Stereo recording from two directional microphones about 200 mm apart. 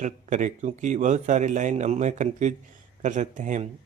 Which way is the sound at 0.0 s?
35° right (ahead or behind).